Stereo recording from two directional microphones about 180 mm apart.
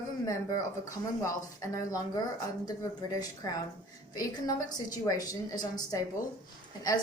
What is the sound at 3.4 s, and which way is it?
Speech, 20° left (ahead or behind).